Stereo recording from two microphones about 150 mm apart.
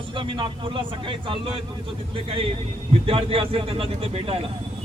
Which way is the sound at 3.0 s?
40° right (ahead or behind).